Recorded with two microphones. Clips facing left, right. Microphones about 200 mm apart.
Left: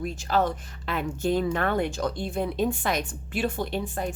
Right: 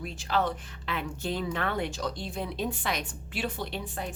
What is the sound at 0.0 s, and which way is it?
Speech, 45° left (ahead or behind).